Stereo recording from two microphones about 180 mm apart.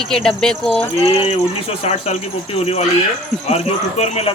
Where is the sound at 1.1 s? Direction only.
30° left (ahead or behind).